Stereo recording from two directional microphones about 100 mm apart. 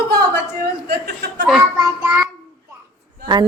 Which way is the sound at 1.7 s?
35° right (ahead or behind).